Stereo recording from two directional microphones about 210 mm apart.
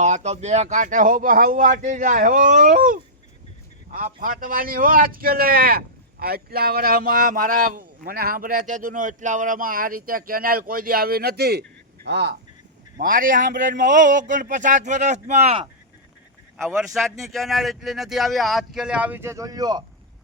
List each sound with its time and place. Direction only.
0.0 s speech: 35° right (ahead or behind); by 12.4 s 55° right (ahead or behind)
13.0 s speech: 40° right (ahead or behind)
16.6 s speech: centre (ahead or behind); by 19.8 s 20° right (ahead or behind)